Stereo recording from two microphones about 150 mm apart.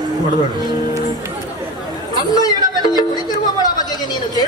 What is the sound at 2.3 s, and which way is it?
Music, 25° left (ahead or behind).